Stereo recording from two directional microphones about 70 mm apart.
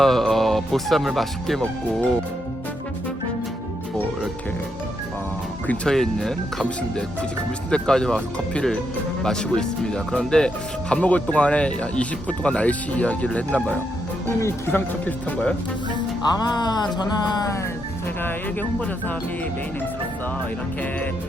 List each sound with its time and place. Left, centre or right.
0.0 s speech: centre
5.6 s speech: centre
5.9 s speech: centre
7.7 s speech: centre
16.4 s speech: left